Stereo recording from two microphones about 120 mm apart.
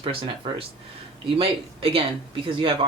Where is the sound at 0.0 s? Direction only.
45° right (ahead or behind).